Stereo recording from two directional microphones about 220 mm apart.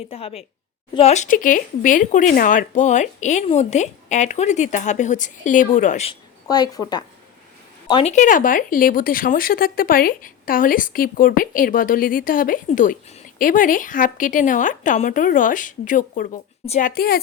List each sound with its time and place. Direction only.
0.1 s a woman's voice: 25° left (ahead or behind)
6.5 s speech: 20° left (ahead or behind)
8.1 s speech: 35° left (ahead or behind)